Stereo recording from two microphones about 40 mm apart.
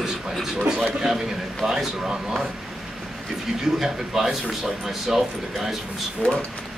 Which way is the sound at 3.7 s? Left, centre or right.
Centre.